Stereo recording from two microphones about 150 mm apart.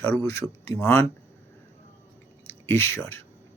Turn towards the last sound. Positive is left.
turn(degrees=15)  # may be behind; listen again after turning